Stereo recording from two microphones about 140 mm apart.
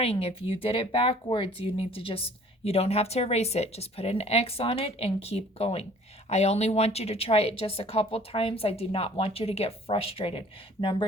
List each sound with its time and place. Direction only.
0.0 s speech: 45° left (ahead or behind)